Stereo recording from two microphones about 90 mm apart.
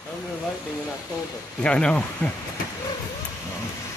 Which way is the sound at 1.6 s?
10° left (ahead or behind).